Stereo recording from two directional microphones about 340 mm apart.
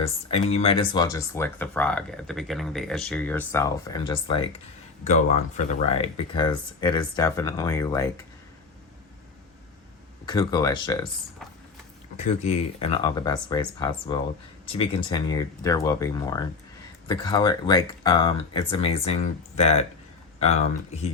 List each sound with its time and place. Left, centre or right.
0.0 s speech: centre
10.2 s speech: centre
12.1 s speech: centre